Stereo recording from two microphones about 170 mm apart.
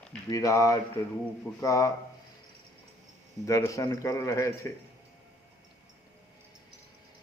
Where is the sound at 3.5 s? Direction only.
20° left (ahead or behind).